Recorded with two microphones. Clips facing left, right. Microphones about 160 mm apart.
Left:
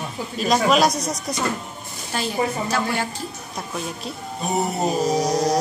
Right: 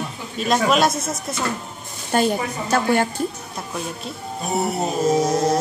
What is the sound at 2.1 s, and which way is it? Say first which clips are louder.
Speech: right 4 dB; 50° right (ahead or behind).